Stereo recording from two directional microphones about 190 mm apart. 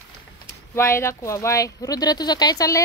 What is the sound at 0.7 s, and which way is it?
Speech, 15° left (ahead or behind).